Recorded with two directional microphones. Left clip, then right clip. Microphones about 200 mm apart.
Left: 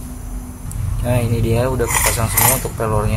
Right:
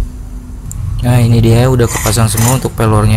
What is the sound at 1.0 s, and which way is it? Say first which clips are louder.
Speech: right 6 dB; 40° right (ahead or behind).